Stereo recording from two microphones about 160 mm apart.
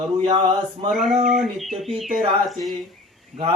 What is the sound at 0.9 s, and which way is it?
Speech, centre (ahead or behind).